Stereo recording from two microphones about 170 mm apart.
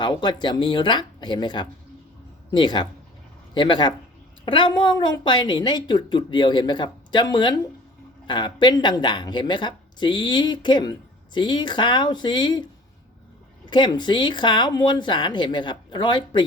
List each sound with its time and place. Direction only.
0.0 s a woman's voice: 25° left (ahead or behind)
13.7 s a woman's voice: 25° left (ahead or behind)